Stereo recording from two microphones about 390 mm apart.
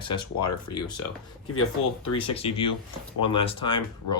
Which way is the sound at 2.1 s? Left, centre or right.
Centre.